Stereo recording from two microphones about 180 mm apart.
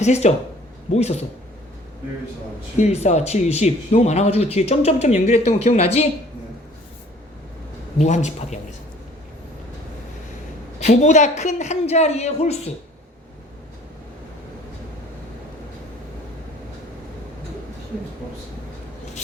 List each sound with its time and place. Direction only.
0.0 s speech: 40° left (ahead or behind)
2.7 s speech: 35° left (ahead or behind)
7.9 s speech: 40° left (ahead or behind)
10.8 s speech: 40° left (ahead or behind)